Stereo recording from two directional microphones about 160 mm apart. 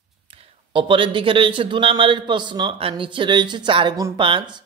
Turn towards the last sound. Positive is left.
turn(degrees=-30)  # may be behind; listen again after turning